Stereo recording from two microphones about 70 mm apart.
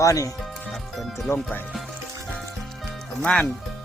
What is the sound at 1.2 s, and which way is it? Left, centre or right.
Speech, left.